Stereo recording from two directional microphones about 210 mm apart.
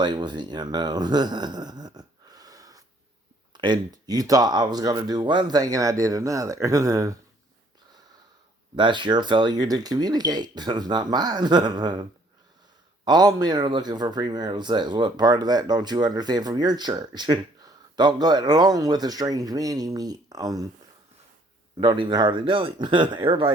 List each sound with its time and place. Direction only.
0.0 s speech: 20° right (ahead or behind)
8.7 s speech: 20° right (ahead or behind)
13.1 s speech: 20° right (ahead or behind)
21.8 s speech: 20° right (ahead or behind)